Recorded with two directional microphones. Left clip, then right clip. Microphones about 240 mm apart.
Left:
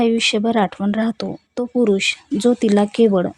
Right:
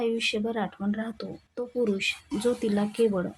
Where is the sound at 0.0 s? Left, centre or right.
Left.